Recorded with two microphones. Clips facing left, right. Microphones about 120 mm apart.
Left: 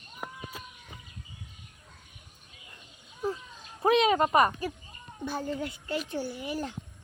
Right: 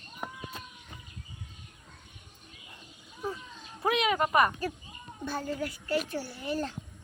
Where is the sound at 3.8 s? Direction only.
30° left (ahead or behind).